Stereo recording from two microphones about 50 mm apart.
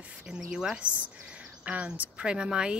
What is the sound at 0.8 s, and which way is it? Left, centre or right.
Speech, right.